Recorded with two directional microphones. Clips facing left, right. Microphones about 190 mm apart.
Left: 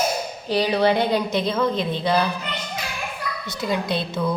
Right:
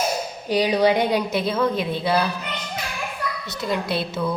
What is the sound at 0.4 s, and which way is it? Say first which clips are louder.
A woman's voice: right 1 dB; 15° right (ahead or behind).